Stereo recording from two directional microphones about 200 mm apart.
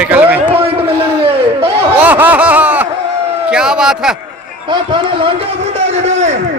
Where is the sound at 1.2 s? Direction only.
30° right (ahead or behind).